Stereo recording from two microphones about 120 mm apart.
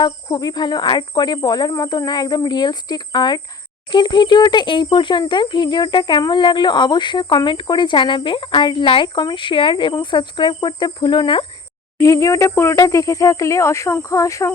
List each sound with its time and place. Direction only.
0.0 s a child's voice: 35° left (ahead or behind)
11.9 s speech: 25° left (ahead or behind)